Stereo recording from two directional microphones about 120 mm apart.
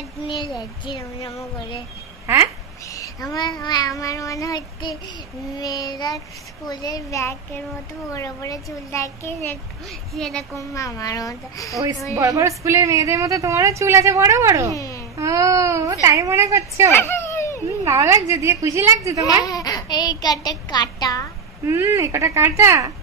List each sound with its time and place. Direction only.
0.6 s child singing: 35° left (ahead or behind)
2.2 s speech: 20° right (ahead or behind)
2.9 s speech: 30° left (ahead or behind)
5.6 s child singing: 35° left (ahead or behind)
6.7 s speech: 30° left (ahead or behind)
10.1 s a woman's voice: 5° left (ahead or behind)
10.5 s speech: 25° left (ahead or behind)
12.2 s speech: 25° right (ahead or behind)
14.7 s a child's voice: 25° left (ahead or behind)
15.1 s speech: 25° right (ahead or behind)
16.9 s a sound: 20° left (ahead or behind)
17.8 s speech: 25° right (ahead or behind)
19.4 s a child's voice: 30° left (ahead or behind)
21.6 s speech: 25° right (ahead or behind)